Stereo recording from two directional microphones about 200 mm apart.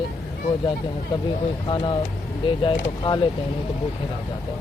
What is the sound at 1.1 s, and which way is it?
Speech, 20° left (ahead or behind).